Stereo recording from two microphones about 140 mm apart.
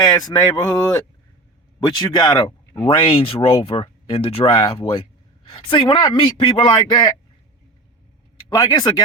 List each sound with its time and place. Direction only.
0.0 s speech: 30° left (ahead or behind)
8.4 s speech: 25° left (ahead or behind)